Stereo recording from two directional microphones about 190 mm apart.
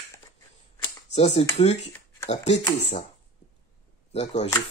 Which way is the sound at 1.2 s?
35° left (ahead or behind).